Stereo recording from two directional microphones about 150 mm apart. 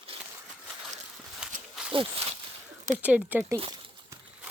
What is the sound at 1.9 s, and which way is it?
Speech, 40° right (ahead or behind).